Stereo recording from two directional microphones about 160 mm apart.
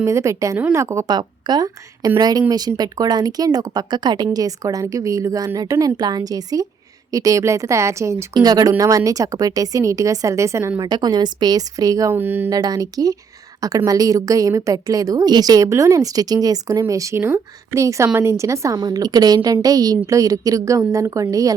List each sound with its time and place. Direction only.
0.0 s a woman's voice: 20° right (ahead or behind)
12.5 s a woman's voice: 25° right (ahead or behind)